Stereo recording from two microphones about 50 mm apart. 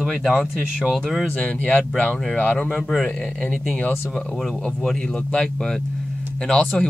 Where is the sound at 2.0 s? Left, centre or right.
Left.